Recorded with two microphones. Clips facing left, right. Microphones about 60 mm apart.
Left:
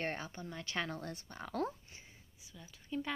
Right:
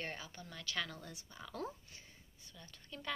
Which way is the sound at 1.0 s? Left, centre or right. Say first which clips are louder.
Left 6 dB; left.